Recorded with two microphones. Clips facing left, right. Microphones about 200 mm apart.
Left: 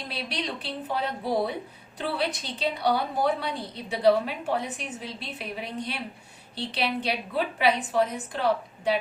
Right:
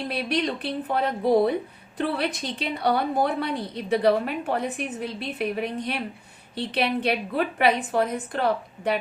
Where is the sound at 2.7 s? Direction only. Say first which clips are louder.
Right 4 dB; 60° right (ahead or behind).